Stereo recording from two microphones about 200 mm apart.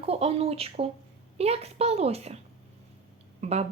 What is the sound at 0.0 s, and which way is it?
Speech, 30° right (ahead or behind).